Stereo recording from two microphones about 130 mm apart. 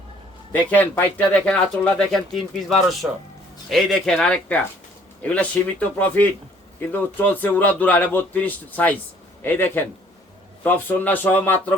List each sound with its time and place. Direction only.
0.5 s speech: 15° left (ahead or behind)
6.9 s speech: 15° left (ahead or behind)